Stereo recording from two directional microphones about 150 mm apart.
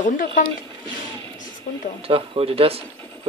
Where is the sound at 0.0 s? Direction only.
60° left (ahead or behind).